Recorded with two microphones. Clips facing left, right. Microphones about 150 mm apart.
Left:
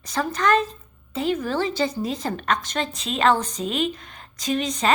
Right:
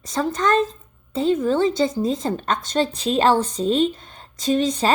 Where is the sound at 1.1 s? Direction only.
25° right (ahead or behind).